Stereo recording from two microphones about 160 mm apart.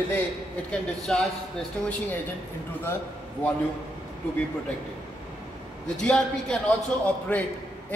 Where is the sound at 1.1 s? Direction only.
5° left (ahead or behind).